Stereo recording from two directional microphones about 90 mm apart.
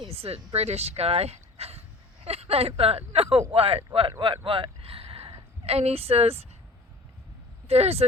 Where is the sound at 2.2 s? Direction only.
90° right.